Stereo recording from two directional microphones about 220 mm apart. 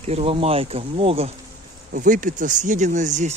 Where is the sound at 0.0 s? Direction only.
30° right (ahead or behind).